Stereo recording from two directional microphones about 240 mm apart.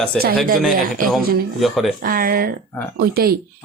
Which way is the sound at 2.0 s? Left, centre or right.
Right.